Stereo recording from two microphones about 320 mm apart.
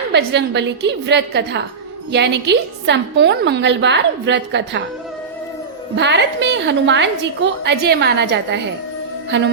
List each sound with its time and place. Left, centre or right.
0.1 s a woman's voice: right
6.0 s a woman's voice: right